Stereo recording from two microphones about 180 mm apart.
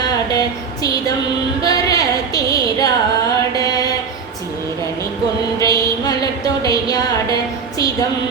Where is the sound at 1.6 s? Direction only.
20° left (ahead or behind).